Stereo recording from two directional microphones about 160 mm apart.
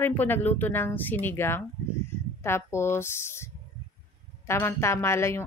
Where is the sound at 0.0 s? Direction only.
10° left (ahead or behind).